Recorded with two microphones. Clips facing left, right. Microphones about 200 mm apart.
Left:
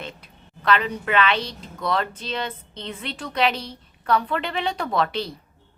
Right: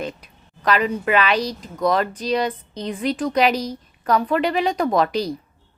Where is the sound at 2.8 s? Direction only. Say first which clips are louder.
Right 8 dB; 10° right (ahead or behind).